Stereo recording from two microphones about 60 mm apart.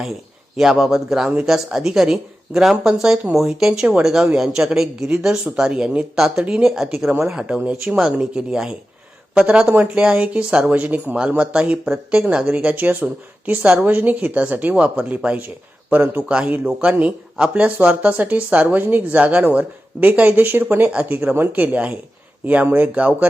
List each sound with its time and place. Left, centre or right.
0.5 s speech: centre
7.6 s speech: centre
15.9 s speech: right
16.3 s speech: centre